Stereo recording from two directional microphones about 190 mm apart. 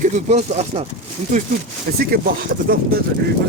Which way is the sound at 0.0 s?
40° right (ahead or behind).